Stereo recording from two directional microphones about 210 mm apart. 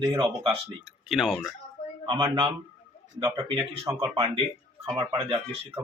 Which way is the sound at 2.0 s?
20° right (ahead or behind).